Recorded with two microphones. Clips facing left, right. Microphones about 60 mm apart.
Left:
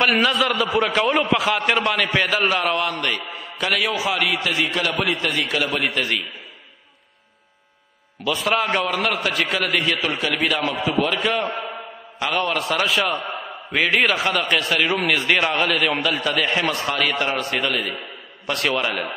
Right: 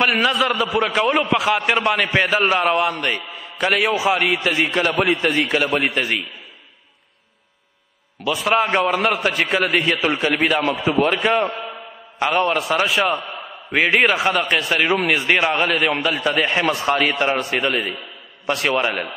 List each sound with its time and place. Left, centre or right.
0.0 s a man's voice: centre; by 6.1 s right
8.2 s a man's voice: centre
8.5 s a man's voice: centre
12.4 s a man's voice: centre
13.7 s a man's voice: centre